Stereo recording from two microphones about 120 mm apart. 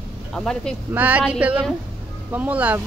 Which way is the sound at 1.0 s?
15° right (ahead or behind).